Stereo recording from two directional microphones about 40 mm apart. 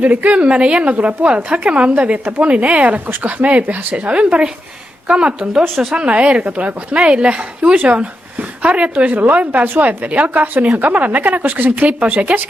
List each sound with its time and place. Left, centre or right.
0.0 s a woman's voice: right
6.4 s speech: right